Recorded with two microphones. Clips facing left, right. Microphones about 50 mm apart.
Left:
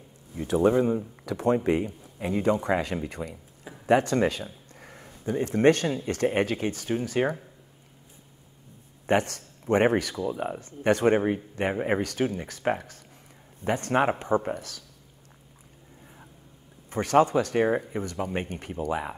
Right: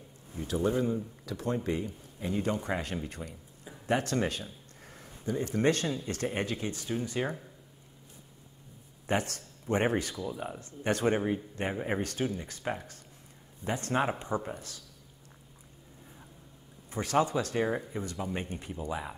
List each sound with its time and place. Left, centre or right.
0.4 s speech: left
3.1 s a sound: left
4.7 s a sound: left
6.0 s speech: left
9.0 s speech: left
10.2 s speech: left
16.9 s speech: left
17.6 s speech: left
17.9 s speech: left